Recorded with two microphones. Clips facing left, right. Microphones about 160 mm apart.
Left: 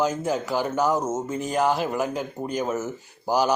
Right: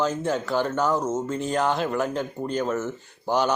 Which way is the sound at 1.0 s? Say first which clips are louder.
Right 1 dB; 25° left (ahead or behind).